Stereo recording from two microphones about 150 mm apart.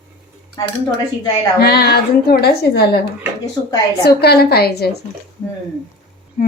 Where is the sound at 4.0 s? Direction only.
90° left.